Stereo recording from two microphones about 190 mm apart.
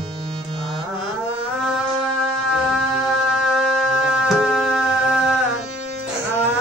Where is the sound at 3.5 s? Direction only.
Centre (ahead or behind).